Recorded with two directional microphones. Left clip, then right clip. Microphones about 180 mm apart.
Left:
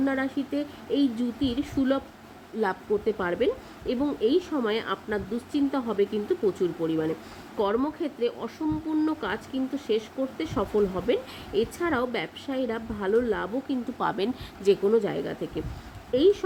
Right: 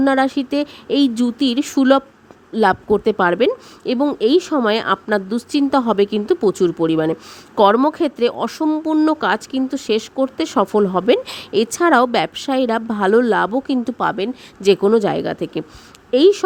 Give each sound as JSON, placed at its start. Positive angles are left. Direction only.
{"t": 0.0, "sound": "speech", "side_deg": -60}
{"t": 2.6, "sound": "speech", "side_deg": -55}
{"t": 14.0, "sound": "speech", "side_deg": -40}
{"t": 14.7, "sound": "speech", "side_deg": -55}